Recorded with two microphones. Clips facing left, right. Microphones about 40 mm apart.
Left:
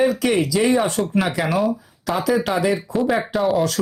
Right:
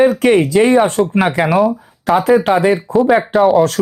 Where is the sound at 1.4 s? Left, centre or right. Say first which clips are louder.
Right 9 dB; centre.